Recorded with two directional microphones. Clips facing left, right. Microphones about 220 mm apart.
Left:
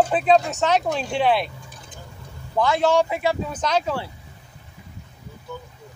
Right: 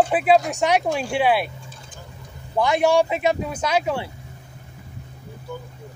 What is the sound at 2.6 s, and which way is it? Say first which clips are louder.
Speech: right 1 dB; 15° right (ahead or behind).